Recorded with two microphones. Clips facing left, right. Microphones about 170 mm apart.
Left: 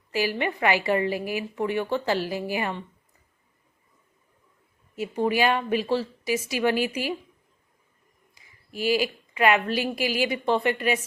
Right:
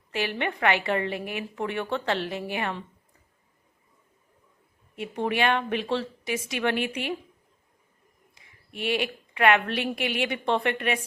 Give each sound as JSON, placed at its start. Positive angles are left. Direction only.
{"t": 0.1, "sound": "a woman's voice", "side_deg": 5}
{"t": 4.9, "sound": "a woman's voice", "side_deg": 5}
{"t": 8.4, "sound": "a woman's voice", "side_deg": 0}